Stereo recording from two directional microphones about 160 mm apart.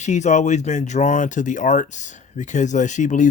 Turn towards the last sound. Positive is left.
turn(degrees=50)  # may be behind; listen again after turning